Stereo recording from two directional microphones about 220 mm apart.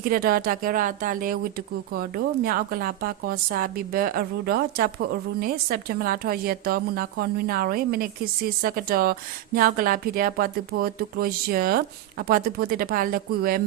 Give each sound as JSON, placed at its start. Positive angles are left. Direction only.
{"t": 0.0, "sound": "speech", "side_deg": -40}